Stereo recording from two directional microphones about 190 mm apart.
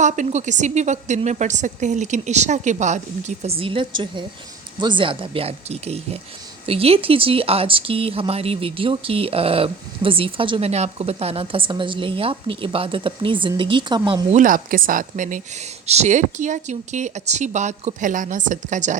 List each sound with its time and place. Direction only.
0.0 s speech: 40° right (ahead or behind)
14.3 s speech: 45° right (ahead or behind)